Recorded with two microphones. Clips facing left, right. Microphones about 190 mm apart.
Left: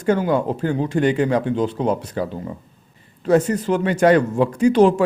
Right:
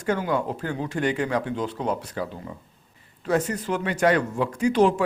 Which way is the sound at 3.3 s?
30° left (ahead or behind).